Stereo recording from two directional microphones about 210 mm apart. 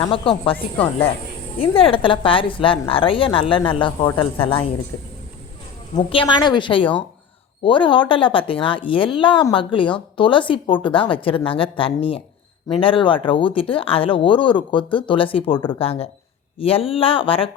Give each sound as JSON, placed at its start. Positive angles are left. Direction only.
{"t": 0.0, "sound": "a woman's voice", "side_deg": 25}
{"t": 0.5, "sound": "speech", "side_deg": 10}
{"t": 1.6, "sound": "a woman's voice", "side_deg": 25}
{"t": 6.0, "sound": "a woman's voice", "side_deg": 25}